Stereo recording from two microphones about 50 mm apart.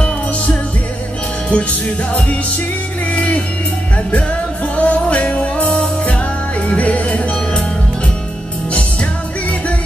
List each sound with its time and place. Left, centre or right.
1.5 s music: left
4.7 s music: left